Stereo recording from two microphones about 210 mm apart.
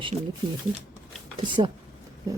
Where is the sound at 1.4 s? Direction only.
20° right (ahead or behind).